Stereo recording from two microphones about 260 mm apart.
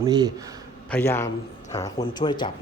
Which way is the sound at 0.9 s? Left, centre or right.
Centre.